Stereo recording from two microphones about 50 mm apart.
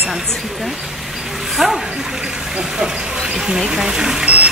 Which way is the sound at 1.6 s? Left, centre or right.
Centre.